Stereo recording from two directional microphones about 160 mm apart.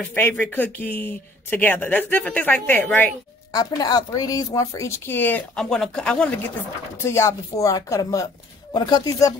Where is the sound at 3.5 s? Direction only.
25° left (ahead or behind); by 6.5 s 5° left (ahead or behind).